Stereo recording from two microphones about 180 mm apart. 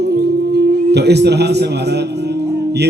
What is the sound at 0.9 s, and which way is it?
Speech, 65° right (ahead or behind).